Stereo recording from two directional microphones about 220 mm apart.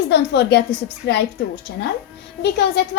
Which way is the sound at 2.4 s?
50° left (ahead or behind).